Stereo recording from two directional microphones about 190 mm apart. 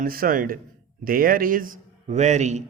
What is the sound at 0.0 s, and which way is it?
A man's voice, 50° right (ahead or behind).